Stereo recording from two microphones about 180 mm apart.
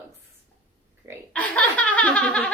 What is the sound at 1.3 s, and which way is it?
A woman's voice, 5° left (ahead or behind).